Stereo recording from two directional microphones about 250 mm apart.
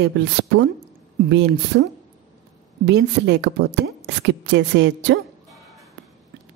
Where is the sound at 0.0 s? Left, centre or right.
Right.